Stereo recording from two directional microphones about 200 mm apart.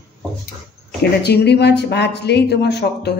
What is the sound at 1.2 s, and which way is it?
Speech, 55° left (ahead or behind).